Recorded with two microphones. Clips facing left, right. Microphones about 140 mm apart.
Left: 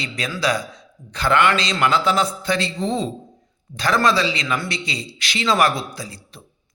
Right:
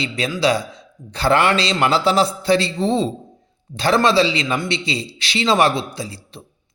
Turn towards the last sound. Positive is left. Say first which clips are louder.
# right 4 dB
turn(degrees=-30)  # may be behind; listen again after turning